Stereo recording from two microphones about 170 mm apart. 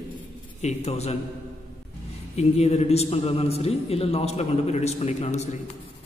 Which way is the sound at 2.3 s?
40° left (ahead or behind).